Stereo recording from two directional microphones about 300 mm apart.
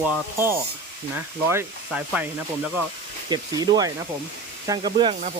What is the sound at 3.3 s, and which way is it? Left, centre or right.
Speech, centre.